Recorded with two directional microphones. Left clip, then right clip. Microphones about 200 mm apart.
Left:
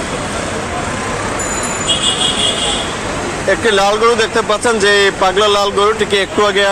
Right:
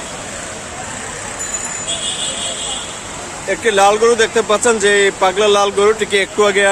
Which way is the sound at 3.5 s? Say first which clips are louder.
Even; 15° right (ahead or behind).